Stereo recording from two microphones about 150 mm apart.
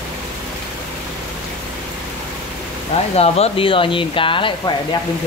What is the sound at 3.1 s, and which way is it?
Speech, 45° left (ahead or behind).